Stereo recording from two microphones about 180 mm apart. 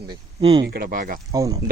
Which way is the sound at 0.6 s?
55° right (ahead or behind).